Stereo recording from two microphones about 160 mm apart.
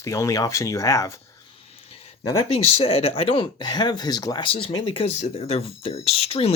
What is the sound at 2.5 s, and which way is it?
Speech, 35° left (ahead or behind).